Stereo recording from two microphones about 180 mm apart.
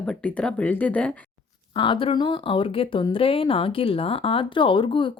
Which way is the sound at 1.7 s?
30° left (ahead or behind).